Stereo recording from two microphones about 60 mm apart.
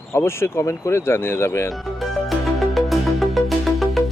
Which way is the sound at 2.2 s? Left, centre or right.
Centre.